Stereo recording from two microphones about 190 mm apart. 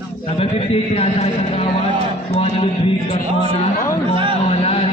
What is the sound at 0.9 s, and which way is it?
A man's voice, 35° left (ahead or behind).